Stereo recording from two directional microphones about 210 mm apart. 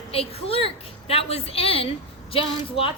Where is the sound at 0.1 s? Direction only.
30° left (ahead or behind).